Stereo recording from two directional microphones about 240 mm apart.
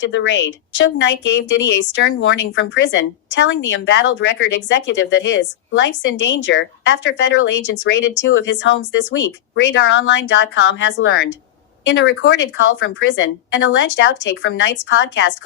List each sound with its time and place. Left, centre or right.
0.0 s a woman's voice: left